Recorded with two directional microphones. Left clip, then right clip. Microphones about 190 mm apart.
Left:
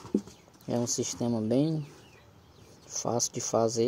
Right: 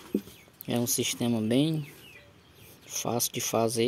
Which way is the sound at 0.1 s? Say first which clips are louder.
Left 1 dB; 10° right (ahead or behind).